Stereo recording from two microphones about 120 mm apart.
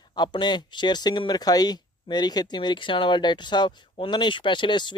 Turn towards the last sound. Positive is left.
turn(degrees=40)  # may be behind; listen again after turning